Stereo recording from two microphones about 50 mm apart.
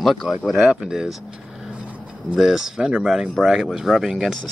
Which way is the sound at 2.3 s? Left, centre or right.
Centre.